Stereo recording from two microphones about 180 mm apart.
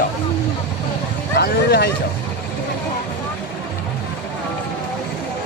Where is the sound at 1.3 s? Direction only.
65° left (ahead or behind).